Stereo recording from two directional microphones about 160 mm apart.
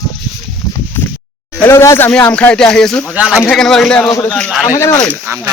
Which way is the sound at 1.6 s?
15° left (ahead or behind).